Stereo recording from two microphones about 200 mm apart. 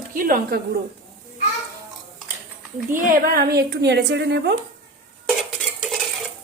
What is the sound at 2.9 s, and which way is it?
A woman's voice, 45° right (ahead or behind).